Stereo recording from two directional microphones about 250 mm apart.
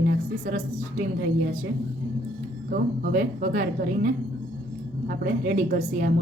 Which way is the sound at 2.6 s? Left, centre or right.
Right.